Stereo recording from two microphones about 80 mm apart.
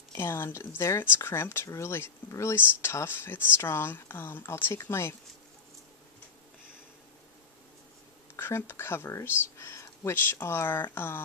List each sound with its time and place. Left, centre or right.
0.1 s speech: left
8.4 s speech: left